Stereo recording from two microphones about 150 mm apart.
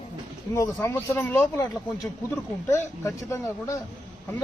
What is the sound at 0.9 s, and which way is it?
Speech, 10° left (ahead or behind).